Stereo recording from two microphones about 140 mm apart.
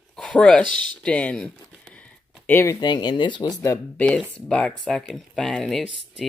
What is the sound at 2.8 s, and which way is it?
Speech, 30° left (ahead or behind).